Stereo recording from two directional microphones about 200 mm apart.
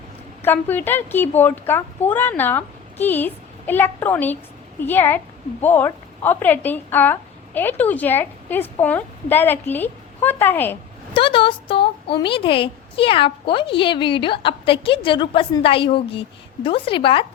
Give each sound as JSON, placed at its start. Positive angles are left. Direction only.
{"t": 0.4, "sound": "a woman's voice", "side_deg": 10}
{"t": 11.1, "sound": "speech", "side_deg": 25}